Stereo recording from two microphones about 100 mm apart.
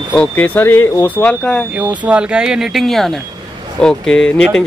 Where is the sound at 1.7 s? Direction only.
15° right (ahead or behind).